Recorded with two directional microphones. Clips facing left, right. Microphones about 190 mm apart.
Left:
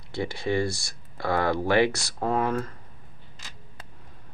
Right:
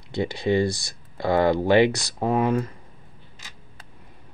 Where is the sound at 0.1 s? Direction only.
20° right (ahead or behind).